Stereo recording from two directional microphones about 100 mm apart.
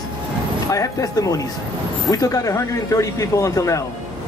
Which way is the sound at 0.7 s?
35° left (ahead or behind).